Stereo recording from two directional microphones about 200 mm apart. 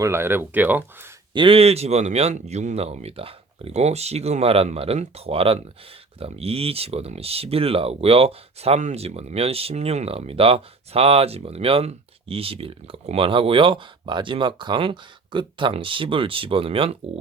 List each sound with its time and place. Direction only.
0.0 s speech: 10° right (ahead or behind)
1.3 s speech: 25° right (ahead or behind)